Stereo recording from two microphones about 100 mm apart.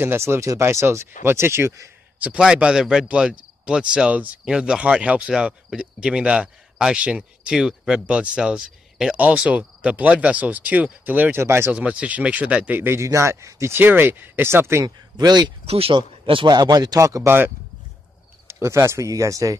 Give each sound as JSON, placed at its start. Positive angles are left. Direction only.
{"t": 0.0, "sound": "speech", "side_deg": -25}
{"t": 2.1, "sound": "speech", "side_deg": -10}
{"t": 11.7, "sound": "speech", "side_deg": -10}
{"t": 15.1, "sound": "speech", "side_deg": -45}
{"t": 15.6, "sound": "speech", "side_deg": -90}
{"t": 15.9, "sound": "speech", "side_deg": -55}
{"t": 16.5, "sound": "speech", "side_deg": -40}
{"t": 18.5, "sound": "speech", "side_deg": -30}